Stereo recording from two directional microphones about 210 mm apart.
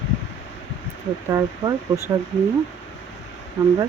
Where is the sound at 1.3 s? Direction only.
15° right (ahead or behind).